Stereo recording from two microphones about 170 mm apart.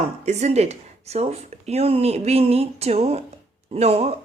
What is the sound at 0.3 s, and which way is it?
A woman's voice, 40° right (ahead or behind).